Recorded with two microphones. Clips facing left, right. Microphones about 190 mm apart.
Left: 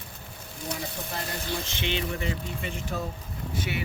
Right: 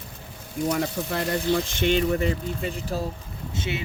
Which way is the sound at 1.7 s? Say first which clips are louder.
Right 9 dB; 45° right (ahead or behind).